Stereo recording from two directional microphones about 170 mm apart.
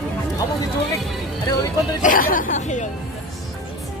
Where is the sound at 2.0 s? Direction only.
55° left (ahead or behind).